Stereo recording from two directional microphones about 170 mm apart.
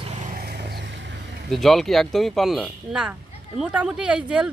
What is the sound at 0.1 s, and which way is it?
Vehicle, 60° right (ahead or behind).